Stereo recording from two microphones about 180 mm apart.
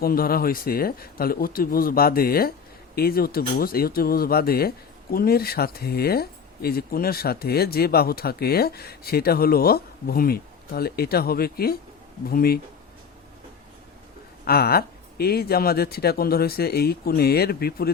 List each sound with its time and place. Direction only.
0.0 s speech: 55° left (ahead or behind)
14.4 s speech: 60° left (ahead or behind)